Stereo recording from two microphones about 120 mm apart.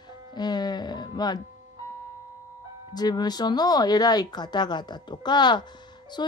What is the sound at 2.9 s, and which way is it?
Speech, 35° left (ahead or behind).